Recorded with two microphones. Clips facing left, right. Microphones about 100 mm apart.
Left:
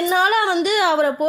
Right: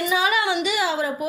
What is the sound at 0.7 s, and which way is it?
Speech, 60° left (ahead or behind).